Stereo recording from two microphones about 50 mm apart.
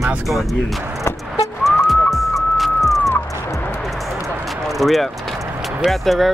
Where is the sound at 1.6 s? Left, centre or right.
Centre.